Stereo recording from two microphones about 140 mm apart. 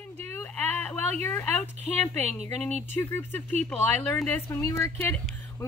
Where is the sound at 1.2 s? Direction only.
15° left (ahead or behind).